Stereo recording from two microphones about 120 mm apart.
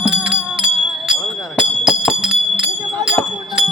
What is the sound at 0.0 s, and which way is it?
Music, 5° right (ahead or behind).